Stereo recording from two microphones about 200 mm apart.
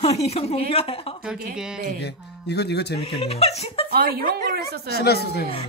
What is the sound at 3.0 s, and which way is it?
Speech, 30° left (ahead or behind).